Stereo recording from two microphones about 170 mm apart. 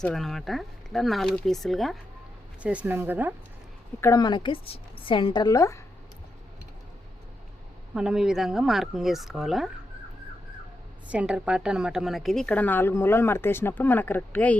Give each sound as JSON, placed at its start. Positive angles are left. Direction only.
{"t": 0.0, "sound": "speech", "side_deg": 0}
{"t": 4.0, "sound": "a woman's voice", "side_deg": 20}
{"t": 7.9, "sound": "speech", "side_deg": -5}
{"t": 11.1, "sound": "a woman's voice", "side_deg": -5}